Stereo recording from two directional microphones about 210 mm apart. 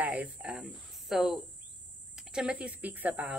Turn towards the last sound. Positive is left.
turn(degrees=-10)  # may be behind; listen again after turning